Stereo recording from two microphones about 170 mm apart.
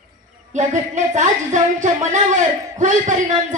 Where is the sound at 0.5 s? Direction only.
45° right (ahead or behind).